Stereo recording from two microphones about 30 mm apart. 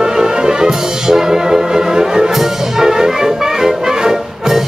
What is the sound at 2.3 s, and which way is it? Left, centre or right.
Brass instrument, centre.